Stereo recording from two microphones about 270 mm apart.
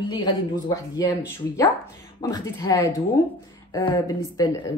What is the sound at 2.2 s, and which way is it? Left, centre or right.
A woman's voice, centre.